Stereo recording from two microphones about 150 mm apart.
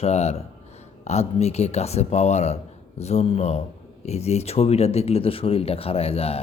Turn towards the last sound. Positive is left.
turn(degrees=40)  # may be behind; listen again after turning